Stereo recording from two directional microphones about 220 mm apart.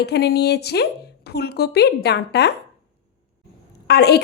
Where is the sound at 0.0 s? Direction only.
45° left (ahead or behind).